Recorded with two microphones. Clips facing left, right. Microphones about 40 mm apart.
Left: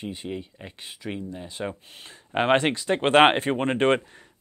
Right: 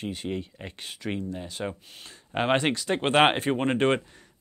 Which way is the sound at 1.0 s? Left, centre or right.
Centre.